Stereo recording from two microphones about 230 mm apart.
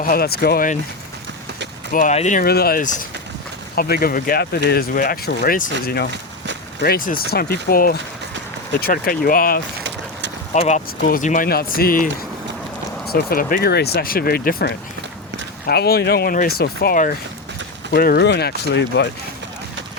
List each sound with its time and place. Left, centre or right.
0.0 s speech: left
1.9 s speech: left
9.8 s vehicle: right
10.5 s speech: left
13.1 s speech: left